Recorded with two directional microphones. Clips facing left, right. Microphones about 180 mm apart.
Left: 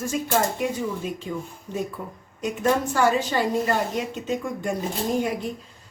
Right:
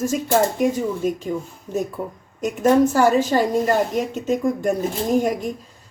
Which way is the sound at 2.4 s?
45° right (ahead or behind).